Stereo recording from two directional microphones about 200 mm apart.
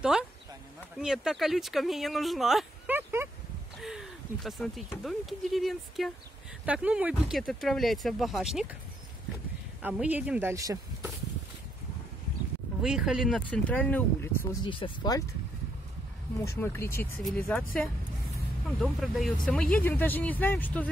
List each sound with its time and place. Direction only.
0.9 s speech: centre (ahead or behind)
9.8 s speech: 10° right (ahead or behind)
12.8 s speech: centre (ahead or behind)
14.6 s speech: 25° left (ahead or behind)
16.4 s speech: 10° left (ahead or behind)